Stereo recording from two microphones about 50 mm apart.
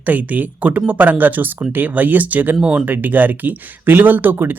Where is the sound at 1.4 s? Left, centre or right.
Right.